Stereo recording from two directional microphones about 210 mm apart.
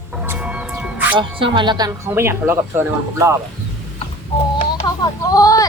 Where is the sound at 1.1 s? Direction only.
25° right (ahead or behind).